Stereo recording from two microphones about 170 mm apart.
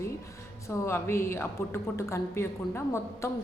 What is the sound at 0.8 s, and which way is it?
A woman's voice, 15° left (ahead or behind).